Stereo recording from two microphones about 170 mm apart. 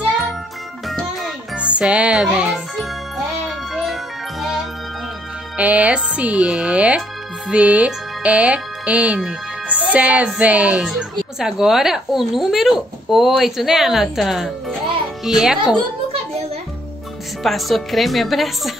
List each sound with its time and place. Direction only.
0.8 s music: centre (ahead or behind)
5.6 s speech: 10° right (ahead or behind)
15.6 s a sound: 35° right (ahead or behind)
17.4 s speech: centre (ahead or behind)